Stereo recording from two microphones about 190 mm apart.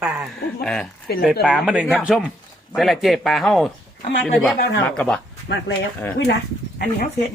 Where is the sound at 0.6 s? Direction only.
5° left (ahead or behind).